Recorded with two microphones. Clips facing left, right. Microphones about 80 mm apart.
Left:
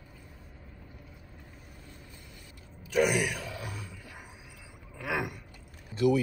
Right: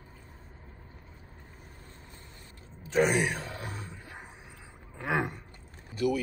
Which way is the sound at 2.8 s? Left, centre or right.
Right.